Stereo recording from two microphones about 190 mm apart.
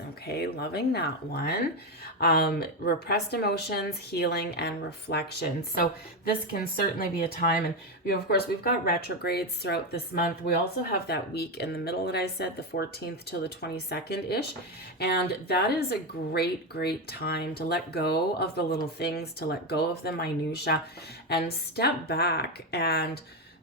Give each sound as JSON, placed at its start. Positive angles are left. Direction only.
{"t": 0.3, "sound": "a woman's voice", "side_deg": 55}
{"t": 21.8, "sound": "a woman's voice", "side_deg": 55}